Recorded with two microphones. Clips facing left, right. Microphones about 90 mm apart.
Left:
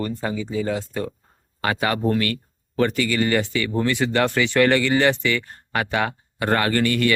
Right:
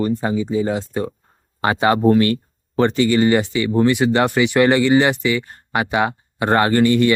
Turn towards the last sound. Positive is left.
turn(degrees=-25)  # may be behind; listen again after turning